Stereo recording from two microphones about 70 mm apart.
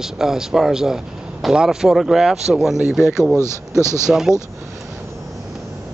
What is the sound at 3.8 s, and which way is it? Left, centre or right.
Speech, right.